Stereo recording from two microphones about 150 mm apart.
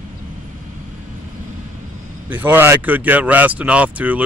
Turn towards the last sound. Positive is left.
turn(degrees=-10)  # may be behind; listen again after turning